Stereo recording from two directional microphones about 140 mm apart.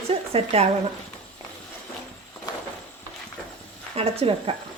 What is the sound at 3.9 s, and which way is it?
Speech, 45° right (ahead or behind).